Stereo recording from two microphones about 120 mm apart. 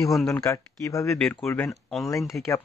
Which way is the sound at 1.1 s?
5° left (ahead or behind).